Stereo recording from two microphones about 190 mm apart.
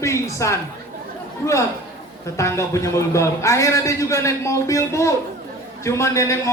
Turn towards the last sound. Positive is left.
turn(degrees=15)  # may be behind; listen again after turning